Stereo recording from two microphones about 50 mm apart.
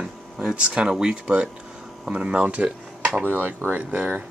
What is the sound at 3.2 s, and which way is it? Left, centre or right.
Speech, right.